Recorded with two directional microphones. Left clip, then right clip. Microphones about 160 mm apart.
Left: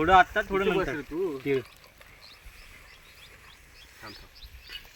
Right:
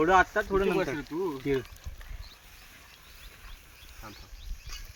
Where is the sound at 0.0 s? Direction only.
50° left (ahead or behind).